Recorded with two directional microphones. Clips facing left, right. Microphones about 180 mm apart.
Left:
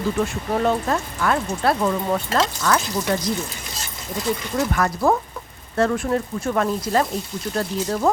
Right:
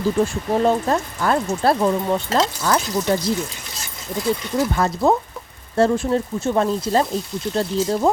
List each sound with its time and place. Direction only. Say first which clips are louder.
0.6 s speech: right 3 dB; 30° right (ahead or behind)
4.5 s speech: even; 25° right (ahead or behind)